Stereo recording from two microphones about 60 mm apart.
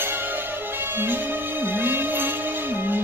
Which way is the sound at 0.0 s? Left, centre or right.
Right.